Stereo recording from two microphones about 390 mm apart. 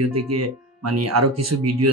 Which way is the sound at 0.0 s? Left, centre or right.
Right.